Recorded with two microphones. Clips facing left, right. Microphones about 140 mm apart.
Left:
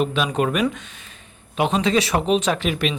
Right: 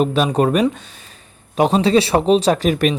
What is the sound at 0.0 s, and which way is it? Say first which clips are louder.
Speech: right 5 dB; 40° right (ahead or behind).